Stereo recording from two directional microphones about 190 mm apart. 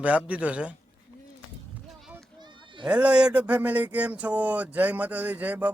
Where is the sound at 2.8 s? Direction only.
5° right (ahead or behind).